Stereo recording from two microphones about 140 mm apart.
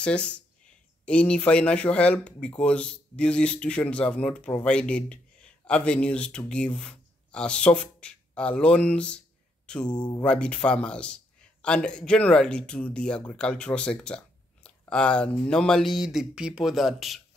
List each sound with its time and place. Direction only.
0.0 s speech: 10° left (ahead or behind)
9.8 s speech: 30° left (ahead or behind)
10.2 s speech: 5° left (ahead or behind)